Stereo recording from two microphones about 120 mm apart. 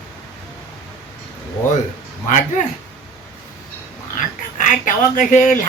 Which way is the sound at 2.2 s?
75° left (ahead or behind).